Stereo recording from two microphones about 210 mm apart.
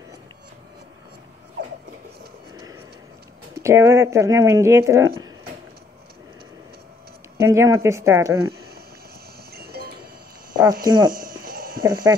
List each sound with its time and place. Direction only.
3.6 s speech: 15° right (ahead or behind)
7.3 s speech: 15° right (ahead or behind)
9.5 s cowbell: 50° right (ahead or behind)
10.5 s a sound: 20° right (ahead or behind)
10.9 s speech: 20° right (ahead or behind)
11.1 s a sound: 45° right (ahead or behind)
11.8 s speech: 15° right (ahead or behind)